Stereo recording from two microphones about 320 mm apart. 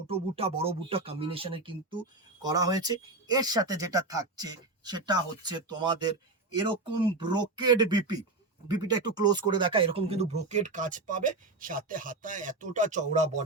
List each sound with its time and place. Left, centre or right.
0.1 s speech: centre